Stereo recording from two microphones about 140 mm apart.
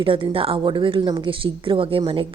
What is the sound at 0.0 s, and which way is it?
A woman's voice, 40° right (ahead or behind).